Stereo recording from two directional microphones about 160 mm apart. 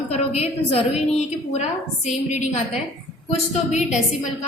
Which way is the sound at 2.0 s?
45° left (ahead or behind).